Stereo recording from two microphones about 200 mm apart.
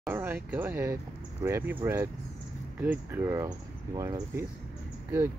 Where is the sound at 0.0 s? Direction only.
10° right (ahead or behind).